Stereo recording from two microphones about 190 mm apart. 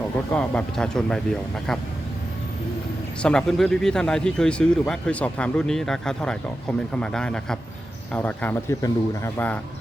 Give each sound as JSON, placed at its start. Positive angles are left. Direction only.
{"t": 0.3, "sound": "a man's voice", "side_deg": 5}
{"t": 3.2, "sound": "a man's voice", "side_deg": 5}